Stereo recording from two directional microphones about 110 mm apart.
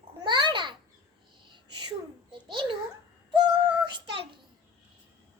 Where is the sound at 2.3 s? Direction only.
45° right (ahead or behind).